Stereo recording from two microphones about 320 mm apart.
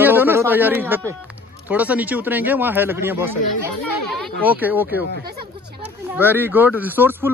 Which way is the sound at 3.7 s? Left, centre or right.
Left.